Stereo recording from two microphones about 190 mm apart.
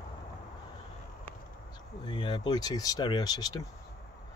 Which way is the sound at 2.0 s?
25° left (ahead or behind).